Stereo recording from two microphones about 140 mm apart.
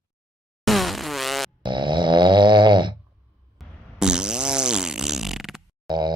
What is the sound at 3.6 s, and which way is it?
Fart, 5° right (ahead or behind).